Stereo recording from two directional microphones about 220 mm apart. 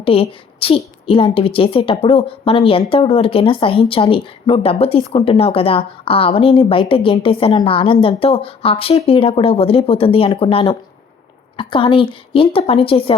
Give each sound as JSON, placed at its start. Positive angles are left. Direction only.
{"t": 0.0, "sound": "a woman's voice", "side_deg": 25}